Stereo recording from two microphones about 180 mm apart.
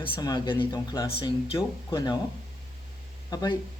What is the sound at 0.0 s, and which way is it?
A man's voice, 20° left (ahead or behind).